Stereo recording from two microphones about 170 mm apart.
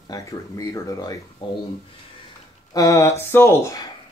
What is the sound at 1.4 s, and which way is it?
Speech, 30° left (ahead or behind).